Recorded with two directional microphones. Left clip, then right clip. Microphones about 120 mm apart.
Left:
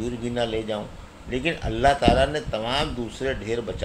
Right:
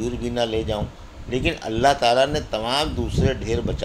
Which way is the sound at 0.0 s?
45° right (ahead or behind).